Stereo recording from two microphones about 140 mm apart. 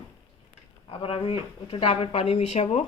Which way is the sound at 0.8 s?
40° left (ahead or behind).